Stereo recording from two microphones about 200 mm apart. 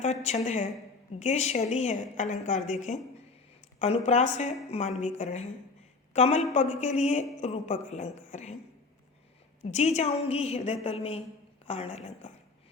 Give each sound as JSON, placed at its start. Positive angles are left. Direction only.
{"t": 0.0, "sound": "a woman's voice", "side_deg": 35}
{"t": 9.7, "sound": "a woman's voice", "side_deg": 35}